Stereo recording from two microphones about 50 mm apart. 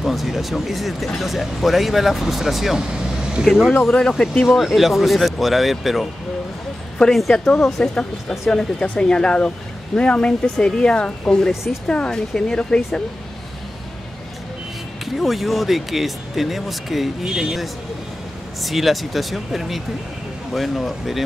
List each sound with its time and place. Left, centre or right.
0.0 s speech: centre
2.9 s vehicle: centre
3.9 s speech: centre
4.5 s speech: centre
7.1 s speech: centre
7.6 s speech: centre
15.1 s speech: centre